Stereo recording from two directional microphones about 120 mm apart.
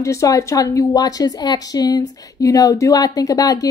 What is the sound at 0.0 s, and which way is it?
A woman's voice, 25° left (ahead or behind).